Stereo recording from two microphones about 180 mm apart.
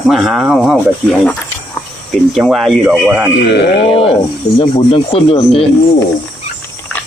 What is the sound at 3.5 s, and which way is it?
Speech, 70° left (ahead or behind).